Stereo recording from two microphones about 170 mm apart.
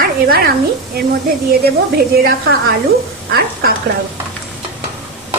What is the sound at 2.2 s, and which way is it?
A woman's voice, 70° right (ahead or behind).